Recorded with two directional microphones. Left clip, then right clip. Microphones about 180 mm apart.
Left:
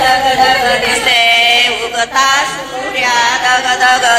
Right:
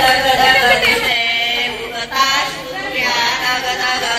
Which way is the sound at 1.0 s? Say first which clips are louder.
Left 7 dB; 35° left (ahead or behind).